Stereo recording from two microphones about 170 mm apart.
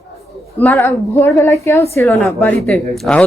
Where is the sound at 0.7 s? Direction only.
15° left (ahead or behind).